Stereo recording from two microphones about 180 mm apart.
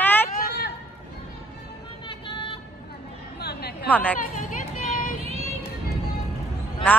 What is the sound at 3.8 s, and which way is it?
Speech, 10° left (ahead or behind).